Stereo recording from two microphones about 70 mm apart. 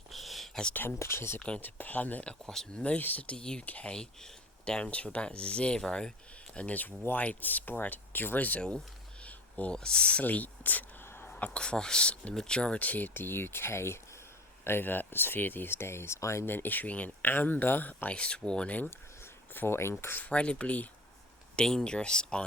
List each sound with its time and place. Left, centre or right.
0.1 s a sound: centre
0.7 s speech: left
1.4 s speech: centre
1.6 s speech: left
2.5 s speech: centre
2.8 s speech: left
9.2 s a sound: centre
11.3 s speech: centre; by 16.5 s left
16.5 s speech: left
18.9 s speech: left; by 22.4 s centre